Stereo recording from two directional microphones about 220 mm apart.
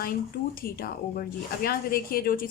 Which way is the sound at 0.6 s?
40° left (ahead or behind).